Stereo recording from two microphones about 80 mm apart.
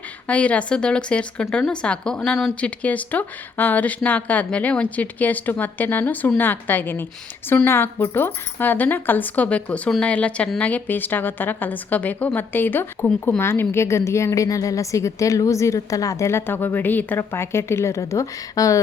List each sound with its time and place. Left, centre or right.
0.3 s a woman's voice: centre; by 18.8 s left